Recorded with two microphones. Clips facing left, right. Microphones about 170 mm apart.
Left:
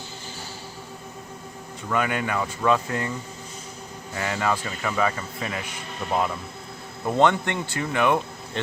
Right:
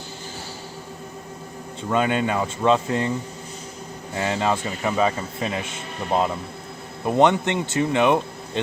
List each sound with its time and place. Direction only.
1.9 s speech: 25° right (ahead or behind)
4.1 s speech: 25° right (ahead or behind)